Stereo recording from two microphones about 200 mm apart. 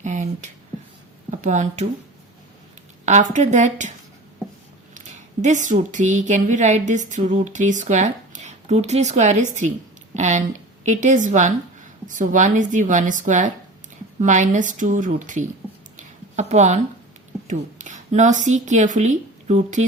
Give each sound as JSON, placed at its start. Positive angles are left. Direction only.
{"t": 0.0, "sound": "a sound", "side_deg": -35}
{"t": 1.4, "sound": "speech", "side_deg": -35}
{"t": 3.1, "sound": "speech", "side_deg": -35}
{"t": 4.9, "sound": "speech", "side_deg": -35}
{"t": 16.0, "sound": "a sound", "side_deg": -35}
{"t": 17.5, "sound": "speech", "side_deg": -35}